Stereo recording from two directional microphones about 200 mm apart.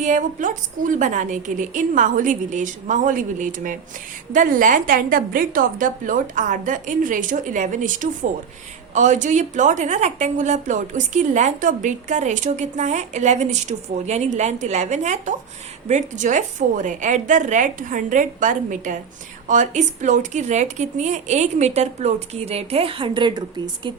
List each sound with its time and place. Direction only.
0.0 s a woman's voice: 40° right (ahead or behind); by 23.9 s 20° right (ahead or behind)